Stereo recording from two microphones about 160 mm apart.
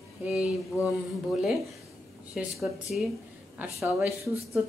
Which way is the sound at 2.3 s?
Centre (ahead or behind).